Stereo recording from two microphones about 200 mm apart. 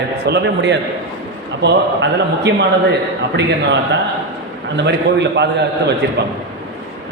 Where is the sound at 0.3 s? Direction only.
60° right (ahead or behind).